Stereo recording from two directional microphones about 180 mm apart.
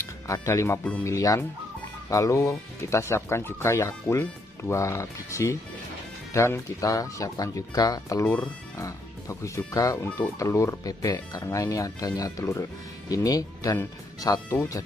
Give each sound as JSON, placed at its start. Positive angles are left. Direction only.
{"t": 0.0, "sound": "speech", "side_deg": 15}